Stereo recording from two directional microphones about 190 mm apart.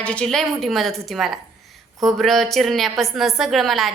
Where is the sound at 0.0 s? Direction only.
5° left (ahead or behind).